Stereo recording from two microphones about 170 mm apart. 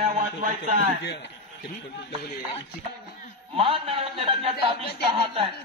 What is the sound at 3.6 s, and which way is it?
A man's voice, 30° right (ahead or behind).